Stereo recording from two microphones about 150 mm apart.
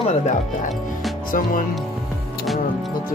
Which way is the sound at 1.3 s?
65° left (ahead or behind).